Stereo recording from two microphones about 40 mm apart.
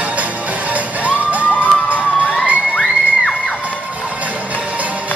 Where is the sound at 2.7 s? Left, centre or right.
Left.